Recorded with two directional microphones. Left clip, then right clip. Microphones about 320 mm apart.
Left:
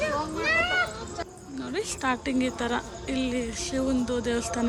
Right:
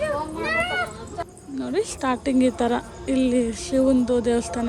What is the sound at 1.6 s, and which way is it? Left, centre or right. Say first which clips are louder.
Speech: right 5 dB; centre.